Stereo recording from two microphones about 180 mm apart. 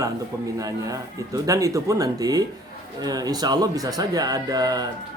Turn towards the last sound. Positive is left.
turn(degrees=-20)  # may be behind; listen again after turning